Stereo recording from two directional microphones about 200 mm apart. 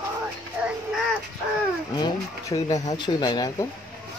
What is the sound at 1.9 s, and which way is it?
Speech, 20° left (ahead or behind).